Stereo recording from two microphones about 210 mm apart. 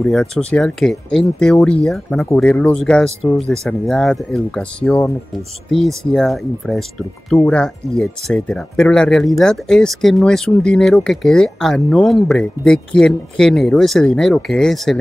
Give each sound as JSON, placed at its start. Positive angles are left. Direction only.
{"t": 0.0, "sound": "speech", "side_deg": 0}